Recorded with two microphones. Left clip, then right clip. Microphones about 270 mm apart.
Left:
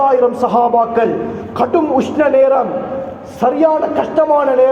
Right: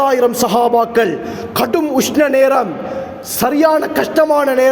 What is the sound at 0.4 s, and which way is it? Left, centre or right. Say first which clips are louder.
A man's voice: left 1 dB; right.